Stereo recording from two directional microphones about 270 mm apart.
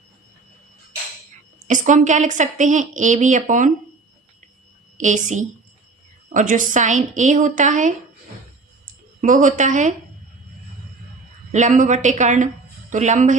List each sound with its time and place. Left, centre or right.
1.5 s a woman's voice: right
4.9 s a woman's voice: right
9.2 s a woman's voice: right
11.5 s a woman's voice: right